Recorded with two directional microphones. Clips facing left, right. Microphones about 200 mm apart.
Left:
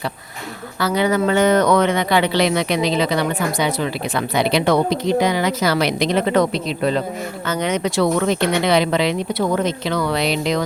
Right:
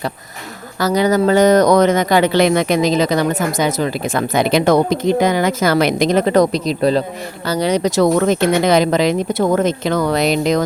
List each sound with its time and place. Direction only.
0.8 s speech: 40° right (ahead or behind)